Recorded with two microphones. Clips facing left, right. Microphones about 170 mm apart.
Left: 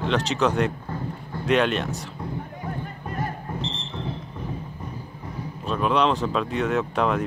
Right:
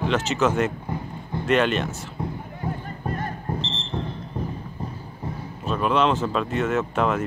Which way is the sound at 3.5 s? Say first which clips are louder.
Right 3 dB; 35° right (ahead or behind).